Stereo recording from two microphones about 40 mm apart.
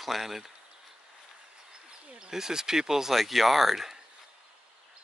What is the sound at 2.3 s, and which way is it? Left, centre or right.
Speech, centre.